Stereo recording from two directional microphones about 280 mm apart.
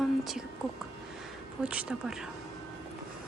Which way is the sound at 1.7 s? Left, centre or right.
Centre.